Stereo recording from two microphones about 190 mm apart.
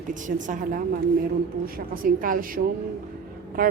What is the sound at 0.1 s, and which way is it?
A woman's voice, 40° right (ahead or behind).